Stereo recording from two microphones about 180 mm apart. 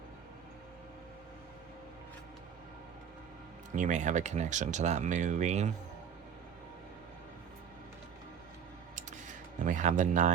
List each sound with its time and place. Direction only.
3.8 s speech: 45° right (ahead or behind)
9.6 s speech: 45° right (ahead or behind)